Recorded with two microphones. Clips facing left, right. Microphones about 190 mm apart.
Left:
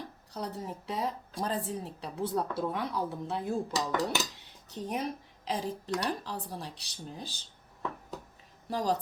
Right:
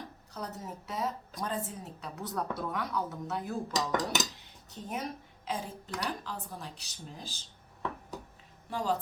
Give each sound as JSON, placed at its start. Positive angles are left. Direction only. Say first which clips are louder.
{"t": 0.3, "sound": "a woman's voice", "louder": "left 3 dB", "side_deg": 30}
{"t": 8.7, "sound": "speech", "louder": "left 2 dB", "side_deg": 40}